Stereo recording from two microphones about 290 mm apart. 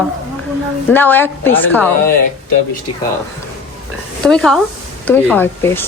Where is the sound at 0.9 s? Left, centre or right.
Centre.